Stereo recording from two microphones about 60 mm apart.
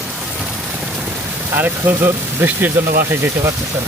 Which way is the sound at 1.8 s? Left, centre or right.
Right.